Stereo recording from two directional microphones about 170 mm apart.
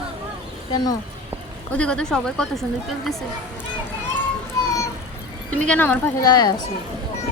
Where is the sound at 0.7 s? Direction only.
25° left (ahead or behind).